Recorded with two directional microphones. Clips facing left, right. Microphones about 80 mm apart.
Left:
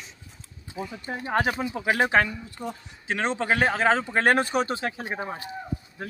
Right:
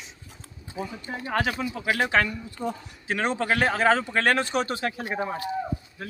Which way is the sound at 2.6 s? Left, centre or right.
Right.